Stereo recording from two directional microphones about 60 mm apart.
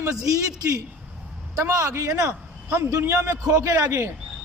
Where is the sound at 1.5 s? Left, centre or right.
Right.